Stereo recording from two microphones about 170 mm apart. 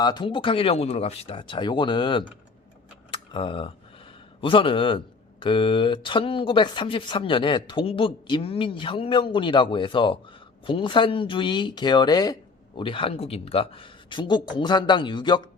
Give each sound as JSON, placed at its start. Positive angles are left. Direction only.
{"t": 0.0, "sound": "speech", "side_deg": 25}
{"t": 3.1, "sound": "computer keyboard", "side_deg": 30}
{"t": 4.4, "sound": "speech", "side_deg": 30}